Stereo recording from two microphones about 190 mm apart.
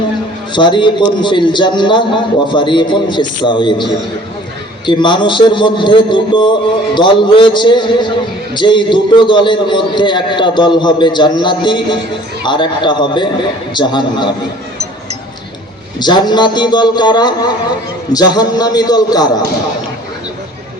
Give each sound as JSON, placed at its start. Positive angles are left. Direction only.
{"t": 0.5, "sound": "a man's voice", "side_deg": 25}
{"t": 4.9, "sound": "a man's voice", "side_deg": 25}
{"t": 16.0, "sound": "a man's voice", "side_deg": 20}